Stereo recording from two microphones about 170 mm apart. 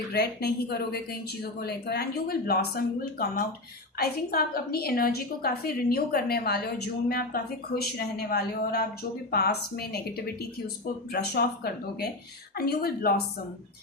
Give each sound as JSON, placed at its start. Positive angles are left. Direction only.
{"t": 0.1, "sound": "a woman's voice", "side_deg": 75}
{"t": 11.1, "sound": "speech", "side_deg": 65}